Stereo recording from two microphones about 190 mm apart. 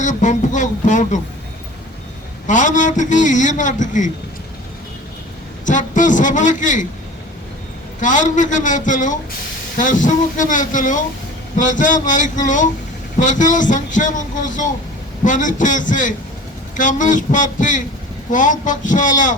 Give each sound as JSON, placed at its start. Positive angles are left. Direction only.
{"t": 0.0, "sound": "a man's voice", "side_deg": 40}
{"t": 2.5, "sound": "a man's voice", "side_deg": 40}
{"t": 5.6, "sound": "a man's voice", "side_deg": 40}
{"t": 8.0, "sound": "a man's voice", "side_deg": 40}